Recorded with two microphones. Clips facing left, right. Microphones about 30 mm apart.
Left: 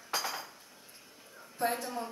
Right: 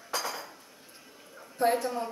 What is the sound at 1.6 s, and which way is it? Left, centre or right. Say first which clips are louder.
Speech: right 7 dB; right.